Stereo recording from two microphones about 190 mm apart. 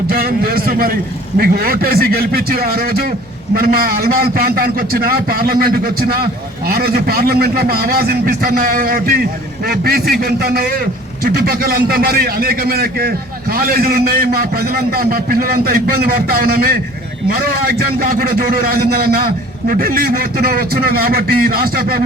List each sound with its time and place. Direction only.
0.1 s a man's voice: 50° right (ahead or behind)